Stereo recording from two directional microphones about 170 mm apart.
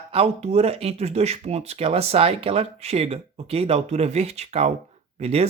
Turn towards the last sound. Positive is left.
turn(degrees=-35)  # may be behind; listen again after turning